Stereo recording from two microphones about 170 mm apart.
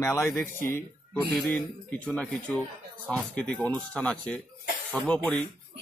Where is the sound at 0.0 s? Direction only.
15° left (ahead or behind).